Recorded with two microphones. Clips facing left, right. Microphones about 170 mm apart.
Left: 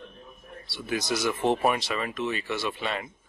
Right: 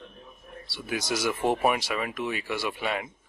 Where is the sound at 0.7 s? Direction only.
10° right (ahead or behind).